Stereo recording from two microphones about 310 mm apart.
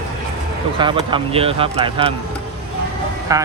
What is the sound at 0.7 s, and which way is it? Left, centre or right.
Speech, centre.